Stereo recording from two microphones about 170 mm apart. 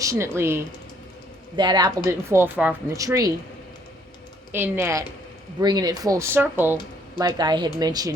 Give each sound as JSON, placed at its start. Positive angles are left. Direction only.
{"t": 0.0, "sound": "speech", "side_deg": -15}
{"t": 1.5, "sound": "speech", "side_deg": -25}
{"t": 4.5, "sound": "speech", "side_deg": -10}
{"t": 7.2, "sound": "speech", "side_deg": -25}